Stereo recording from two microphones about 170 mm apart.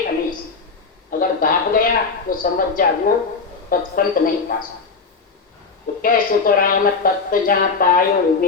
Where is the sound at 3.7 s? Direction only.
55° left (ahead or behind).